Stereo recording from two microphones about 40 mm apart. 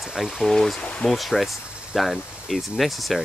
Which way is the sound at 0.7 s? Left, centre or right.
Left.